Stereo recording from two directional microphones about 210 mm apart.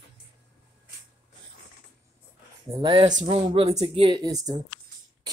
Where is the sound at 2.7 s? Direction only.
20° right (ahead or behind).